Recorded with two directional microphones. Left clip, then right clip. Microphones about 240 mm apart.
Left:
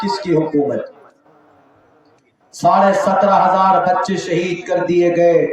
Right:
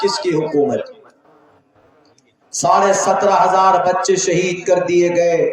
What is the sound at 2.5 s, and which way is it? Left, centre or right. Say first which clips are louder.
A man's voice: left 1 dB; right.